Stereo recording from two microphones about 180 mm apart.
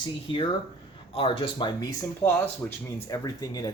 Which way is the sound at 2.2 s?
15° left (ahead or behind).